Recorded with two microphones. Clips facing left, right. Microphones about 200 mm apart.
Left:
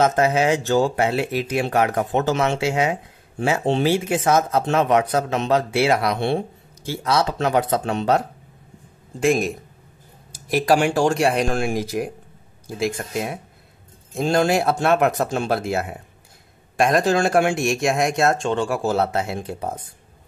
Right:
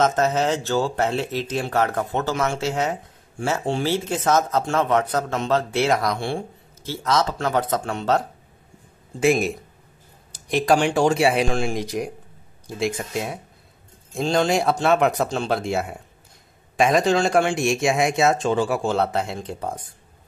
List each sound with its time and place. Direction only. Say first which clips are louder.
0.0 s speech: left 2 dB; 10° left (ahead or behind)
3.6 s speech: left 6 dB; 20° left (ahead or behind)
3.9 s speech: left 2 dB; 10° left (ahead or behind)
6.1 s speech: left 5 dB; 20° left (ahead or behind)
9.2 s speech: even; centre (ahead or behind)